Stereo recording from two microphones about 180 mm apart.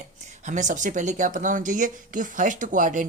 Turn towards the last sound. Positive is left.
turn(degrees=-45)  # may be behind; listen again after turning